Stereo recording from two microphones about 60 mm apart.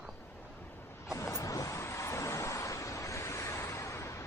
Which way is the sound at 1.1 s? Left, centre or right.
Left.